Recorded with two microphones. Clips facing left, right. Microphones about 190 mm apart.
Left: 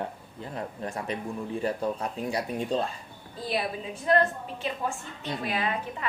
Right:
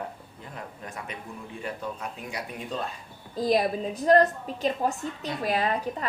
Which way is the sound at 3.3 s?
40° right (ahead or behind).